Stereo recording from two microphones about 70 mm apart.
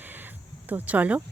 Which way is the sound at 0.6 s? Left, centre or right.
Right.